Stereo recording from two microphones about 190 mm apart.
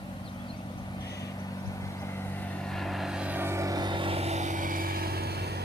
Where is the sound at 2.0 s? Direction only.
10° left (ahead or behind).